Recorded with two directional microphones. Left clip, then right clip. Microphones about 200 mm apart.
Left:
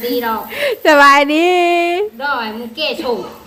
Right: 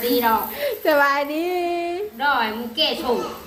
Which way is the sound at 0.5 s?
40° left (ahead or behind).